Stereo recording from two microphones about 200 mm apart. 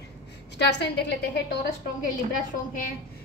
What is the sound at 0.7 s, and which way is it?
Speech, 60° left (ahead or behind).